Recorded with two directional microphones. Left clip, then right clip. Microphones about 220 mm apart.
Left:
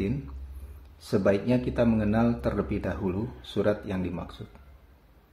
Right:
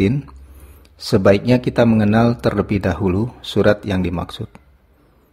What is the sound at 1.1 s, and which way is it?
Speech, 45° right (ahead or behind).